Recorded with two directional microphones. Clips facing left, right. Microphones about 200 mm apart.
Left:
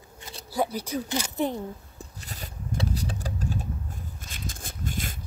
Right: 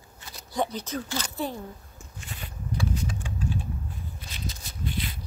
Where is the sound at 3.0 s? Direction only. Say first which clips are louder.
Even; 35° left (ahead or behind).